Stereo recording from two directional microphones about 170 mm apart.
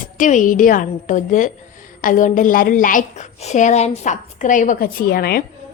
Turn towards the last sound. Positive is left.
turn(degrees=65)  # may be behind; listen again after turning